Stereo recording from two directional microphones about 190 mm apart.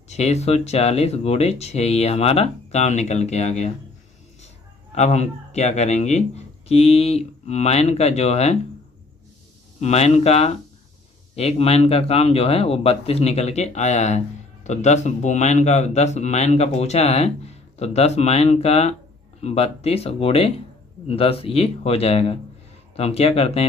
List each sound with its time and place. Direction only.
0.1 s a man's voice: 35° left (ahead or behind)
4.9 s a man's voice: 35° left (ahead or behind)
9.8 s a man's voice: 35° left (ahead or behind)